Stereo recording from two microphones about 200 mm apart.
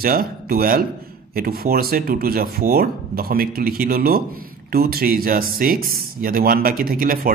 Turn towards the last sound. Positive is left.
turn(degrees=-45)  # may be behind; listen again after turning